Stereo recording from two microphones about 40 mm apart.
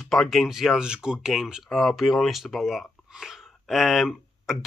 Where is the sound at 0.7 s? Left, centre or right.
Right.